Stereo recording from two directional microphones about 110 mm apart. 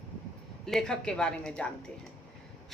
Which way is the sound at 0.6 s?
5° left (ahead or behind).